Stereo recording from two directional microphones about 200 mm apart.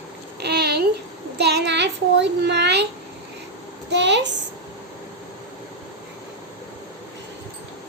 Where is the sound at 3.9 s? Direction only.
60° right (ahead or behind).